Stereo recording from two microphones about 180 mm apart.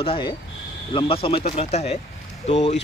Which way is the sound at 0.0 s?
30° left (ahead or behind).